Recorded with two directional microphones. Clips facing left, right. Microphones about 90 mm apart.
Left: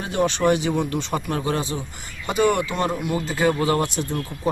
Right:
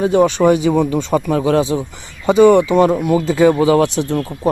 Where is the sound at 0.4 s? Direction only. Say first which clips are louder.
Right 5 dB; 30° right (ahead or behind).